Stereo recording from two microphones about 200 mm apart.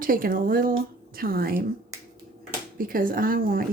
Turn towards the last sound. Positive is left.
turn(degrees=-45)  # may be behind; listen again after turning